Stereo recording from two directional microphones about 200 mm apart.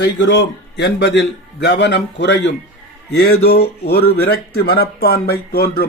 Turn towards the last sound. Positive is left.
turn(degrees=50)  # may be behind; listen again after turning